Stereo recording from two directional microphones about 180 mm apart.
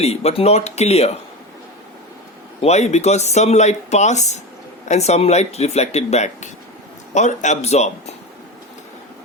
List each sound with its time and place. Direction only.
0.0 s speech: 35° left (ahead or behind)
2.6 s speech: 35° left (ahead or behind)